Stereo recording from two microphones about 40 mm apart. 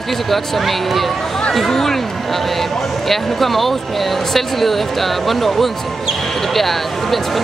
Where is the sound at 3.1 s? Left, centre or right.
Centre.